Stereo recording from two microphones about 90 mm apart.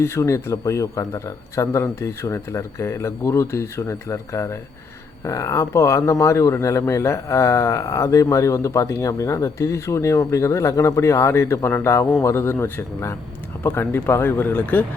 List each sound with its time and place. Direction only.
0.0 s speech: 30° left (ahead or behind)